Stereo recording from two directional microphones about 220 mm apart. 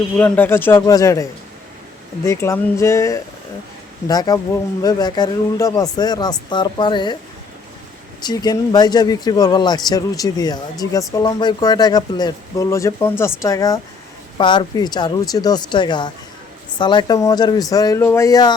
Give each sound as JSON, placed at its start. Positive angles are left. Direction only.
{"t": 0.2, "sound": "a man's voice", "side_deg": 5}
{"t": 8.2, "sound": "a man's voice", "side_deg": 20}